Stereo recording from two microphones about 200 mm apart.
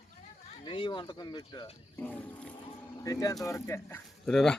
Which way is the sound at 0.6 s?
25° left (ahead or behind).